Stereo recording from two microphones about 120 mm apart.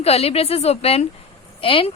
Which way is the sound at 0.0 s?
55° left (ahead or behind).